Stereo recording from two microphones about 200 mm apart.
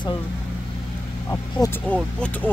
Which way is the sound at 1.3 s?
10° left (ahead or behind).